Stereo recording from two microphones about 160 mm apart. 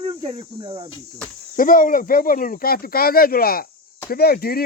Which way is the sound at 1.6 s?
60° left (ahead or behind).